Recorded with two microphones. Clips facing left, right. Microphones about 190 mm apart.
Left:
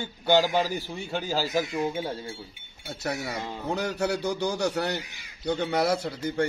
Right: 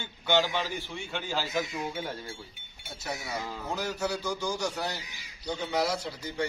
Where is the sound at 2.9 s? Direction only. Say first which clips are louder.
Left 5 dB; 65° left (ahead or behind).